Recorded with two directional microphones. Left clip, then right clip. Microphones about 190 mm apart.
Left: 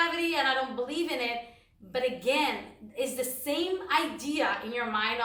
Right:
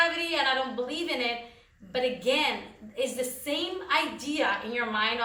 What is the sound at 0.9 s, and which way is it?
A woman's voice, 15° left (ahead or behind).